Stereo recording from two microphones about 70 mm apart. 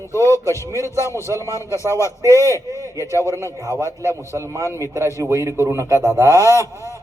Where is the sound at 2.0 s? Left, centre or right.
Right.